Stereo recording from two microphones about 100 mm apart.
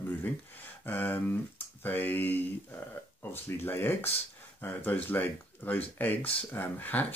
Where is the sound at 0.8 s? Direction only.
20° left (ahead or behind).